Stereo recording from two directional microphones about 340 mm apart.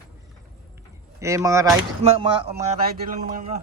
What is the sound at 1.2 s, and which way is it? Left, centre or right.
Speech, centre.